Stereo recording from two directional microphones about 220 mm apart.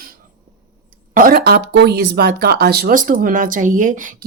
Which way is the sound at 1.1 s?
40° right (ahead or behind).